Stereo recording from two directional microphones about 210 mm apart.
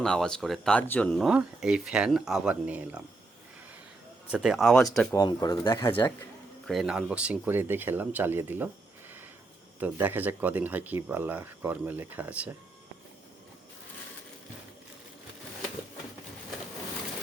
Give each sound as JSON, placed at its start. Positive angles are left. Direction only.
{"t": 0.0, "sound": "speech", "side_deg": 5}
{"t": 4.3, "sound": "speech", "side_deg": 0}
{"t": 5.1, "sound": "speech", "side_deg": 20}
{"t": 6.7, "sound": "speech", "side_deg": 0}
{"t": 9.8, "sound": "speech", "side_deg": -10}